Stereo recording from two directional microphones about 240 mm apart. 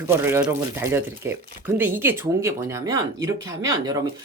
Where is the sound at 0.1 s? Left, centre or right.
Centre.